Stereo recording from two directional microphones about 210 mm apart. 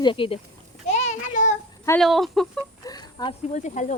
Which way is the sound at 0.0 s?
25° left (ahead or behind).